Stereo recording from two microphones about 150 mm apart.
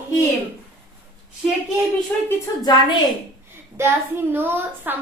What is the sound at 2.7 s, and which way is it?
Speech, 25° left (ahead or behind).